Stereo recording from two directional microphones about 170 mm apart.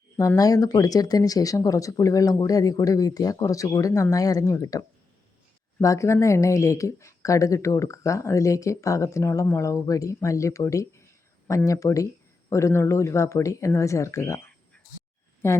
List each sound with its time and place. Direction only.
0.2 s speech: 20° left (ahead or behind)